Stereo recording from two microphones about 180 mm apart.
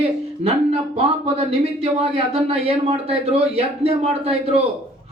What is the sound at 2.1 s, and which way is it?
A man's voice, 30° right (ahead or behind).